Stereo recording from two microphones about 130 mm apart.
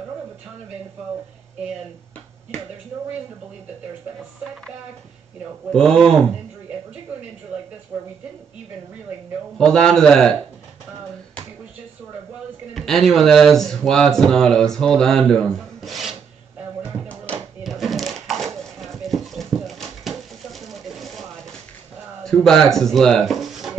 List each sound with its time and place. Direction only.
5.7 s speech: 5° left (ahead or behind)
7.9 s speech: 20° right (ahead or behind)
9.6 s speech: 5° left (ahead or behind)
12.7 s speech: centre (ahead or behind)
17.6 s a sound: centre (ahead or behind)
22.2 s speech: 5° left (ahead or behind)